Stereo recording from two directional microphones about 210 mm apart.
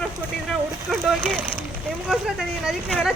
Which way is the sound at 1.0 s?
10° right (ahead or behind).